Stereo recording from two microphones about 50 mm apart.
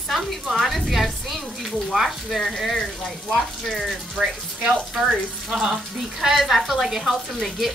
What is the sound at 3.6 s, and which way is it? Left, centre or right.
Speech, centre.